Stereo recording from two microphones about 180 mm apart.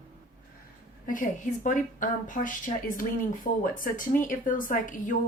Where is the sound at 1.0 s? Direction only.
45° left (ahead or behind).